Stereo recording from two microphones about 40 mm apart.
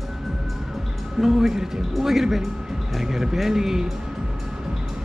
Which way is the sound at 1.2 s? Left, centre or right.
Centre.